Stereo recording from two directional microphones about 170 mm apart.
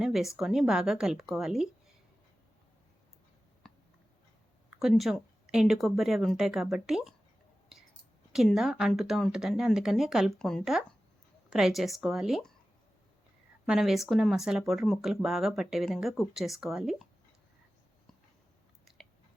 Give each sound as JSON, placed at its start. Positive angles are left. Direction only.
{"t": 0.0, "sound": "speech", "side_deg": 0}
{"t": 4.8, "sound": "speech", "side_deg": 0}
{"t": 8.3, "sound": "speech", "side_deg": 0}
{"t": 13.7, "sound": "speech", "side_deg": 0}
{"t": 19.0, "sound": "chewing", "side_deg": 0}